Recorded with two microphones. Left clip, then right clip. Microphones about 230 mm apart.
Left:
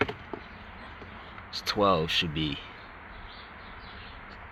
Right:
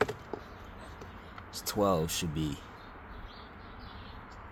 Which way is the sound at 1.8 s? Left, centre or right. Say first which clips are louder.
Left 5 dB; centre.